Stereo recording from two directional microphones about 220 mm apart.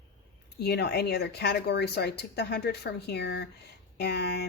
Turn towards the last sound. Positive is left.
turn(degrees=50)  # may be behind; listen again after turning